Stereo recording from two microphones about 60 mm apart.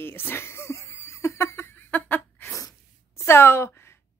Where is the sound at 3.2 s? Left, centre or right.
Left.